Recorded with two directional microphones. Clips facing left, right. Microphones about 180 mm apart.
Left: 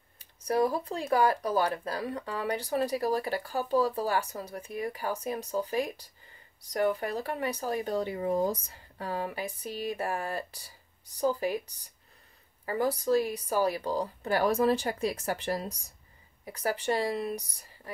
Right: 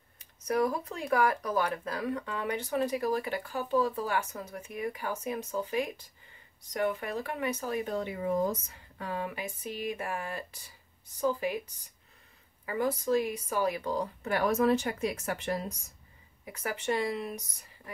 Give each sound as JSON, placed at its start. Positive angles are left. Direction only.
{"t": 0.2, "sound": "speech", "side_deg": 30}
{"t": 12.6, "sound": "speech", "side_deg": 35}